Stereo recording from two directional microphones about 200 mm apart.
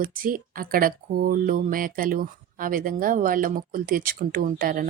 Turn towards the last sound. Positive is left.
turn(degrees=-45)  # may be behind; listen again after turning